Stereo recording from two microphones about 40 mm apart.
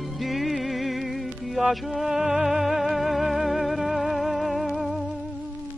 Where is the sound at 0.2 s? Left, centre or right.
Centre.